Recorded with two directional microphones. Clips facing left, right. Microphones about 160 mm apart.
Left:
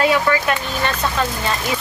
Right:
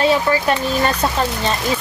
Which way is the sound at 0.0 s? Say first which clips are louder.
Right 1 dB; 30° right (ahead or behind).